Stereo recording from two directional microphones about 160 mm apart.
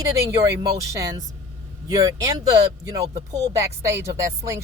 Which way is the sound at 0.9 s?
20° right (ahead or behind).